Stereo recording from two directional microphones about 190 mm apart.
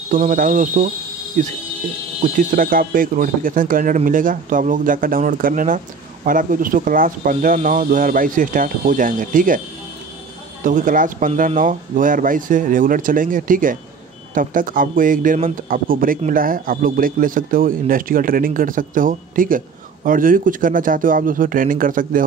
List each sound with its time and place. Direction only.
0.1 s speech: 45° right (ahead or behind)
2.2 s speech: 45° right (ahead or behind)
10.6 s speech: 45° right (ahead or behind)